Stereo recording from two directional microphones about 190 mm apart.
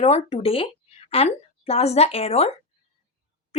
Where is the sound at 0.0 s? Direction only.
30° left (ahead or behind).